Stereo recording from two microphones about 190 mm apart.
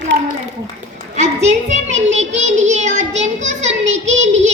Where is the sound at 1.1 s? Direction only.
35° right (ahead or behind).